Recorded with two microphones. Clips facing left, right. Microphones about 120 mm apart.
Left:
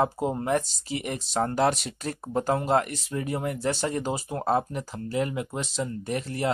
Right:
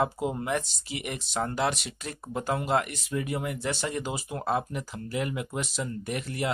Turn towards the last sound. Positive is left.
turn(degrees=35)  # may be behind; listen again after turning